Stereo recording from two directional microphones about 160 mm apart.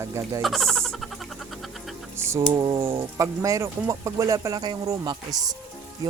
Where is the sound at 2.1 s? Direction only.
15° right (ahead or behind).